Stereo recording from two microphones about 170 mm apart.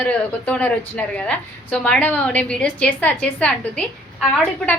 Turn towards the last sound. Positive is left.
turn(degrees=5)  # may be behind; listen again after turning